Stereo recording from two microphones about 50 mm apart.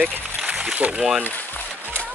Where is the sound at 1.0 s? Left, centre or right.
Centre.